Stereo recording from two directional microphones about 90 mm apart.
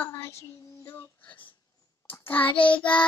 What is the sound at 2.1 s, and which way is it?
Child singing, 20° left (ahead or behind).